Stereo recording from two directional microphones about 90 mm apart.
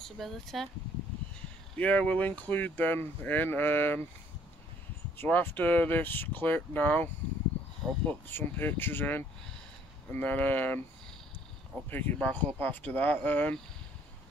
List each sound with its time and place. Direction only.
0.0 s speech: centre (ahead or behind)
1.8 s speech: 15° left (ahead or behind)
5.1 s speech: 25° left (ahead or behind)
11.9 s speech: 20° left (ahead or behind)